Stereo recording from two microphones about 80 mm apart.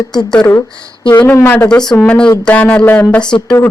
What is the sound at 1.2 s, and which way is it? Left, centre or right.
Speech, left.